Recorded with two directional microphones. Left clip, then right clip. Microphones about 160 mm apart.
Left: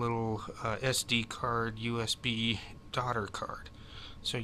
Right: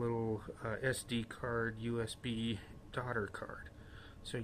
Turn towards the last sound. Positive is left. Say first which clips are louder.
# left 9 dB
turn(degrees=20)  # may be behind; listen again after turning